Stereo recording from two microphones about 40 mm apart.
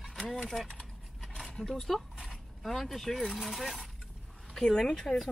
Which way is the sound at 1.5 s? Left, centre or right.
Centre.